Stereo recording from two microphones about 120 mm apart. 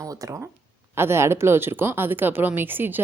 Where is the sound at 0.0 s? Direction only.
25° right (ahead or behind).